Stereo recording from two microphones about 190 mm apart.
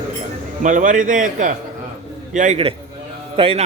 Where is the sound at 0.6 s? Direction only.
40° right (ahead or behind).